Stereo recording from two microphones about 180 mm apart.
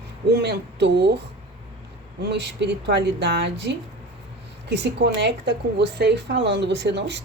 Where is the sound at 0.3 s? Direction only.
65° right (ahead or behind).